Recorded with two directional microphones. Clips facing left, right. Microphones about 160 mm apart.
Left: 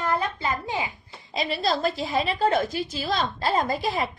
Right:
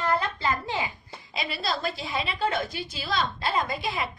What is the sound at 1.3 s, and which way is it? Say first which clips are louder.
A woman's voice: left 5 dB; 40° left (ahead or behind).